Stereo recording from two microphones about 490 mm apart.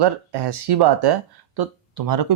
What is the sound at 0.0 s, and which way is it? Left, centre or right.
Speech, right.